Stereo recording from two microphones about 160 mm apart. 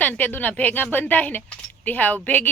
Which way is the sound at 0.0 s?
10° left (ahead or behind).